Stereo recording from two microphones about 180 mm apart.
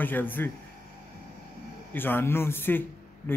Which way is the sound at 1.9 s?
10° left (ahead or behind).